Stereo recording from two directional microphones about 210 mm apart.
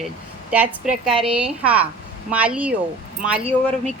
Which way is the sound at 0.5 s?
5° right (ahead or behind).